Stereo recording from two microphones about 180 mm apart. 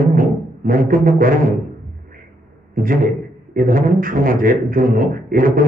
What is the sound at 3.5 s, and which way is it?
A man's voice, 50° right (ahead or behind).